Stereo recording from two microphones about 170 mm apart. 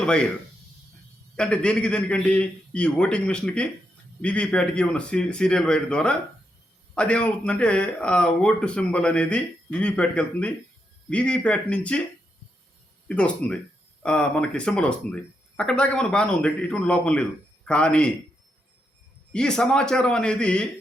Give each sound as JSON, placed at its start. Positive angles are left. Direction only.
{"t": 0.0, "sound": "speech", "side_deg": 5}
{"t": 1.4, "sound": "speech", "side_deg": 5}
{"t": 13.1, "sound": "speech", "side_deg": 5}
{"t": 19.3, "sound": "speech", "side_deg": 5}